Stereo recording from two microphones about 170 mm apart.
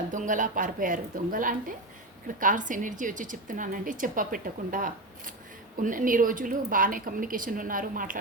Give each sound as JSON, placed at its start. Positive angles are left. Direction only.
{"t": 0.1, "sound": "speech", "side_deg": -50}